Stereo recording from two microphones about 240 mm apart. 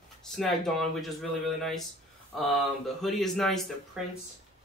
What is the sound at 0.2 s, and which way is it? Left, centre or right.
Speech, centre.